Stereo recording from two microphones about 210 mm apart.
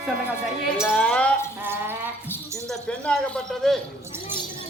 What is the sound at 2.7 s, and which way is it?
Speech, 5° left (ahead or behind).